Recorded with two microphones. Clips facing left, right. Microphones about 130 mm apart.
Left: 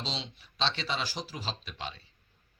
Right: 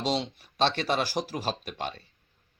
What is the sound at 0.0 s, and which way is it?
Speech, 50° right (ahead or behind).